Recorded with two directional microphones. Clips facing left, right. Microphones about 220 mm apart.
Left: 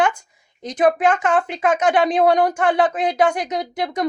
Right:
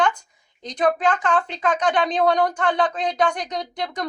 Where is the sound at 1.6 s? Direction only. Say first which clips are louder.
Left 4 dB; 25° left (ahead or behind).